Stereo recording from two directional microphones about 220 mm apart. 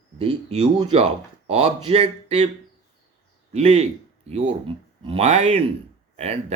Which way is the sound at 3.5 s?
30° right (ahead or behind).